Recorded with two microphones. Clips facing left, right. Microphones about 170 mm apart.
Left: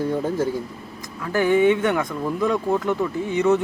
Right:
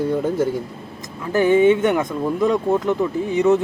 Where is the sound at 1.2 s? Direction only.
20° right (ahead or behind).